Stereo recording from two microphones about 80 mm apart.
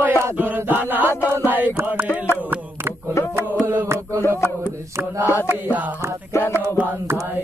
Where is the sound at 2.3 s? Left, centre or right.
Right.